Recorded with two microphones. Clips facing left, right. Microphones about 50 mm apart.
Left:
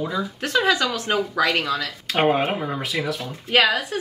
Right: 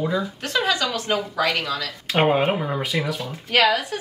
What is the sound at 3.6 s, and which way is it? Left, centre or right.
Speech, left.